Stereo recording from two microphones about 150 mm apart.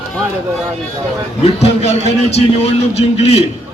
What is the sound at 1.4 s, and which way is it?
A man's voice, 45° left (ahead or behind).